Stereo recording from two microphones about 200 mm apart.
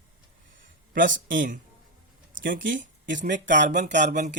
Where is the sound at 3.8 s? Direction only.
40° right (ahead or behind).